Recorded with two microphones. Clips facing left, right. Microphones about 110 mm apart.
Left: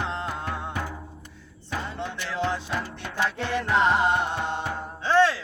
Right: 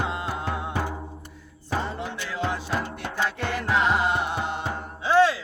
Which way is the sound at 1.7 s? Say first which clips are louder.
Right 3 dB; 35° right (ahead or behind).